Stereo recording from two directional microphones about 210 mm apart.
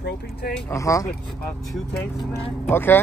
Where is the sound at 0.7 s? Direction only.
15° left (ahead or behind).